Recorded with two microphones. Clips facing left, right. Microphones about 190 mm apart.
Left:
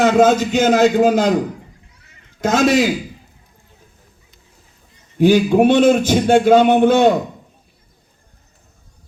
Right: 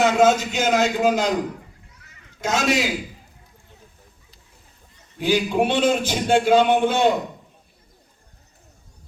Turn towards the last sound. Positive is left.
turn(degrees=50)  # may be behind; listen again after turning